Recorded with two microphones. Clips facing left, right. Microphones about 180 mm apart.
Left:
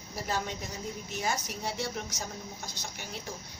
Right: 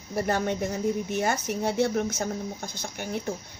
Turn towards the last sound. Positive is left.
turn(degrees=-55)  # may be behind; listen again after turning